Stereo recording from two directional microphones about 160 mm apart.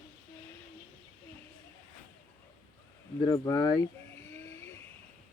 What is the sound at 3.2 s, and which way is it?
Speech, 20° left (ahead or behind).